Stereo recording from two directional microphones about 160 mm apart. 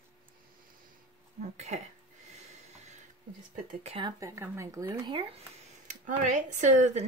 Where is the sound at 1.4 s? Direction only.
45° right (ahead or behind).